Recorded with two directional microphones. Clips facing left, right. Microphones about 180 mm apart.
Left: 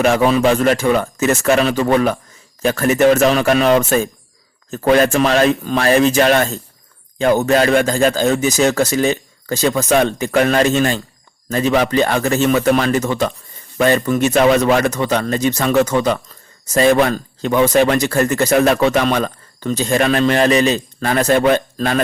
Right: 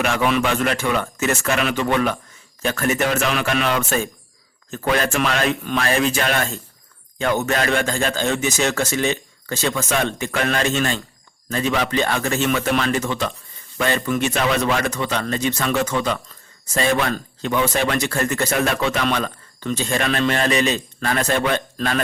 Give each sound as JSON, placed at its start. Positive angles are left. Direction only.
{"t": 0.0, "sound": "a man's voice", "side_deg": 35}